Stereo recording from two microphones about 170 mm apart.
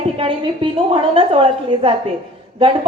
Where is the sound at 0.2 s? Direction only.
30° right (ahead or behind).